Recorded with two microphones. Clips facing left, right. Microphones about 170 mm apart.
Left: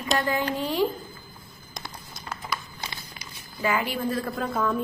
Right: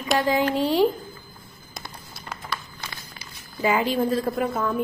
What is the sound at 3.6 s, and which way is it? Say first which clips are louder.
Speech: right 5 dB; 20° right (ahead or behind).